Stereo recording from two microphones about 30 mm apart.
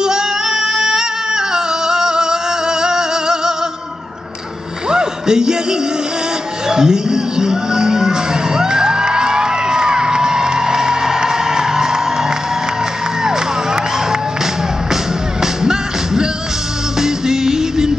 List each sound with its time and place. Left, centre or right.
0.0 s yodeling: right
2.8 s music: right
4.8 s a sound: right
6.7 s music: right
15.4 s music: right